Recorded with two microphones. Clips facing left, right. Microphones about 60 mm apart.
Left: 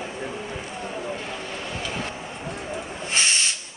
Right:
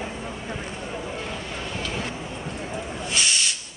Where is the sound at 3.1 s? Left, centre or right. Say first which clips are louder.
Left 1 dB; left.